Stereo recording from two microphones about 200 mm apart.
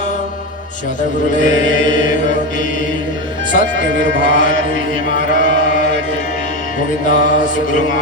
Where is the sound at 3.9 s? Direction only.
65° right (ahead or behind).